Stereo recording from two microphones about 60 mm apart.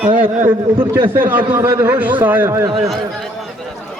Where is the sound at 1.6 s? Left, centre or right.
Right.